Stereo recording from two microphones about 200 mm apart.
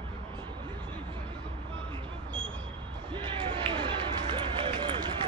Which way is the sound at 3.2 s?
25° right (ahead or behind).